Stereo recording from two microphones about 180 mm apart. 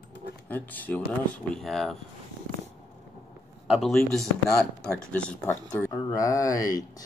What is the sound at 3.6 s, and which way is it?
A man's voice, centre (ahead or behind).